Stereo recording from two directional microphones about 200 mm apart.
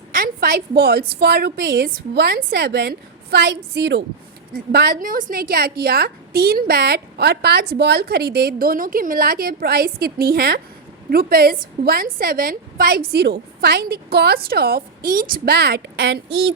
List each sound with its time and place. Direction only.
0.2 s a woman's voice: 50° right (ahead or behind)